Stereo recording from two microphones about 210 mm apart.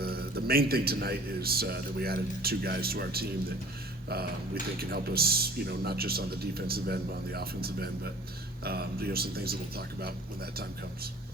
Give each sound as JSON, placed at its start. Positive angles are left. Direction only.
{"t": 0.0, "sound": "speech", "side_deg": -45}
{"t": 4.8, "sound": "speech", "side_deg": -45}